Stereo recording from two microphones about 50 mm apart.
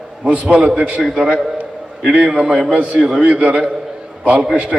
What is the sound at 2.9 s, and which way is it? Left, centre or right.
A man's voice, centre.